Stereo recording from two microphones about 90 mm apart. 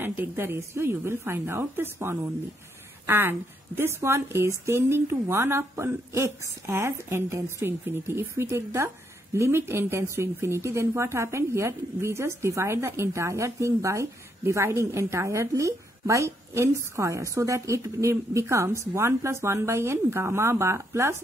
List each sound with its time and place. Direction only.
0.0 s a woman's voice: 25° right (ahead or behind)